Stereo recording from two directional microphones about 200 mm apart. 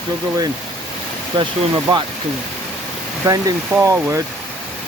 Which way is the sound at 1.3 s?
25° right (ahead or behind).